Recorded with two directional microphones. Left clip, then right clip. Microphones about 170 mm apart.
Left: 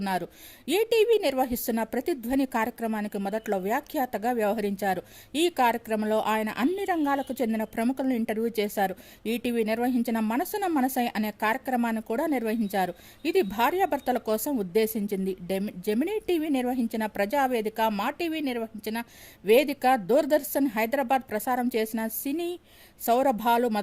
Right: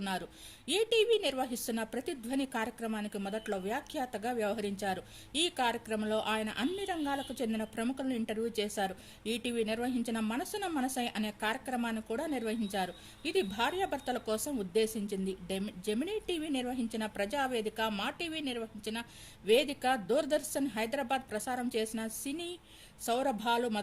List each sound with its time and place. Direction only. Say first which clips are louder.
0.0 s a woman's voice: left 8 dB; 45° left (ahead or behind)